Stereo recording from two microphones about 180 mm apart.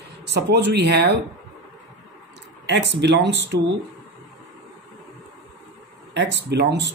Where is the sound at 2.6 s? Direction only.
70° right (ahead or behind).